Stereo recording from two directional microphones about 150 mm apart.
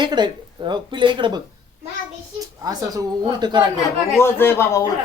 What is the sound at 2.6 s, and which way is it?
Speech, 25° right (ahead or behind).